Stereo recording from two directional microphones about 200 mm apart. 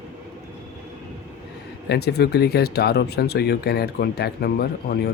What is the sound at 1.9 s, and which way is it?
Speech, 55° left (ahead or behind).